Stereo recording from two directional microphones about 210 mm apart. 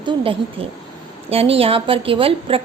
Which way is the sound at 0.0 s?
25° right (ahead or behind).